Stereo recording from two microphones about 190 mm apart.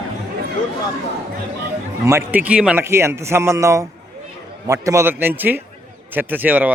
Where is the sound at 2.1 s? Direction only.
10° right (ahead or behind).